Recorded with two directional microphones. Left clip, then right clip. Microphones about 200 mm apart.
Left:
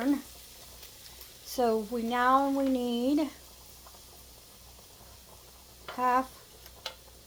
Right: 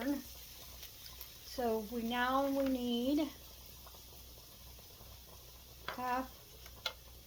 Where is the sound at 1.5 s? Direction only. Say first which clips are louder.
Left 9 dB; 40° left (ahead or behind).